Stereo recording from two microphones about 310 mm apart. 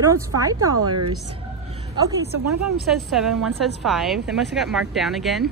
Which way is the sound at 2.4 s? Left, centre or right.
Right.